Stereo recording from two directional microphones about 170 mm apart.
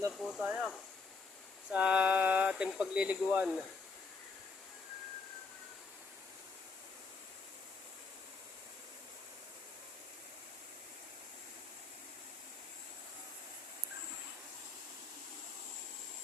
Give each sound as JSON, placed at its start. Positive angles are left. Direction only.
{"t": 0.1, "sound": "snake", "side_deg": 0}
{"t": 0.4, "sound": "speech", "side_deg": -10}
{"t": 1.7, "sound": "speech", "side_deg": -5}